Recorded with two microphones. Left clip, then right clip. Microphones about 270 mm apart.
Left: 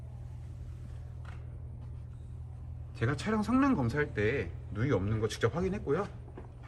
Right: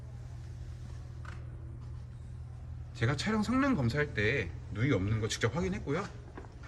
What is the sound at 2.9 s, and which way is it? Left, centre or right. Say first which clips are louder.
A man's voice: even; centre.